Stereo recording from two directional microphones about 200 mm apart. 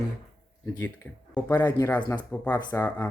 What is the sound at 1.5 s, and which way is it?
Speech, 20° left (ahead or behind).